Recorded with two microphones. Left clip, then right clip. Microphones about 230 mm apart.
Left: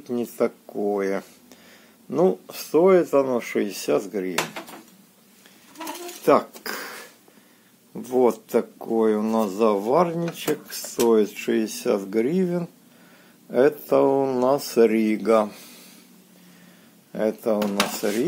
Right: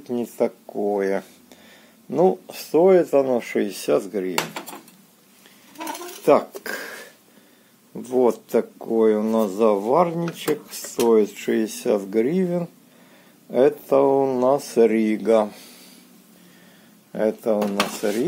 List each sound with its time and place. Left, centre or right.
0.0 s speech: centre
6.2 s a sound: centre
7.9 s speech: centre
17.1 s speech: centre